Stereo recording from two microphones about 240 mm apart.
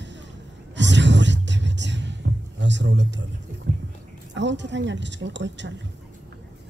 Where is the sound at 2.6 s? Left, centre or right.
Right.